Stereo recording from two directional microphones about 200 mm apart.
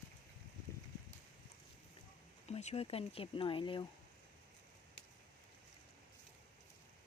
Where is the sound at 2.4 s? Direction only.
30° left (ahead or behind).